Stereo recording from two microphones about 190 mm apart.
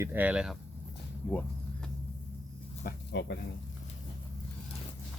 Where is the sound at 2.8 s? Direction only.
65° left (ahead or behind).